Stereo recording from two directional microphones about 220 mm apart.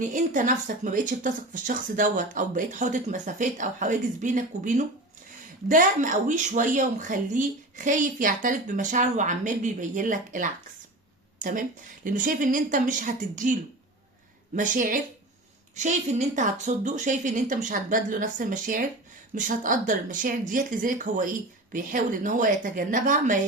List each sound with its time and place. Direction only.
0.0 s speech: 35° right (ahead or behind)
12.0 s speech: 35° right (ahead or behind)